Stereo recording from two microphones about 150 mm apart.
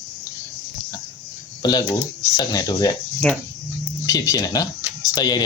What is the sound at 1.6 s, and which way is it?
Speech, 25° left (ahead or behind).